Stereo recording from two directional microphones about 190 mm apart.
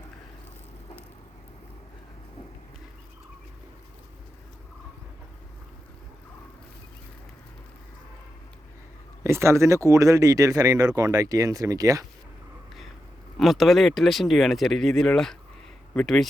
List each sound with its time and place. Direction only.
9.2 s speech: 15° right (ahead or behind)
13.3 s speech: centre (ahead or behind)